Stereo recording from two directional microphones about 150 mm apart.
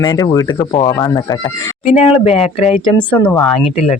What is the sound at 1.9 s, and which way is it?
Speech, 40° left (ahead or behind).